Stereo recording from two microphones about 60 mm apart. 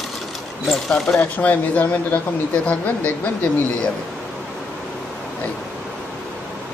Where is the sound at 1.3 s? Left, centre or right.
Left.